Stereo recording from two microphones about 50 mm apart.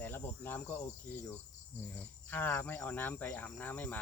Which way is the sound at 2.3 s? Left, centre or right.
Left.